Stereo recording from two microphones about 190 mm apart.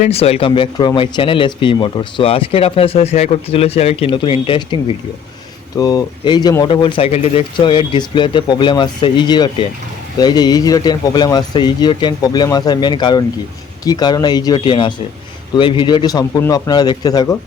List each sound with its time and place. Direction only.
0.0 s speech: 30° left (ahead or behind)